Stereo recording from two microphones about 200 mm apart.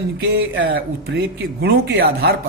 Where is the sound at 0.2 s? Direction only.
65° right (ahead or behind).